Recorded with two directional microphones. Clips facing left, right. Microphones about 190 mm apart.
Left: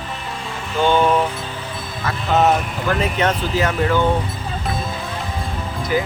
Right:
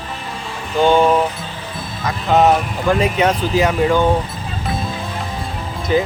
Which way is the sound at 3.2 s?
10° right (ahead or behind).